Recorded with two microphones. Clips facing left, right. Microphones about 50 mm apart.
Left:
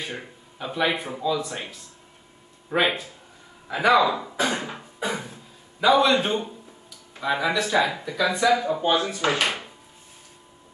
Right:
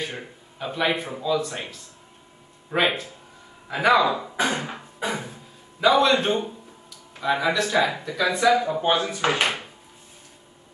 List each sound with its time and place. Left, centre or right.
0.0 s a man's voice: centre
2.7 s speech: centre
4.4 s a sound: centre
7.2 s speech: centre
8.8 s speech: centre